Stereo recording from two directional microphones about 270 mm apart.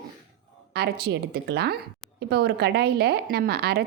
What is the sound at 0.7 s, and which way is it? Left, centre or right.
A woman's voice, right.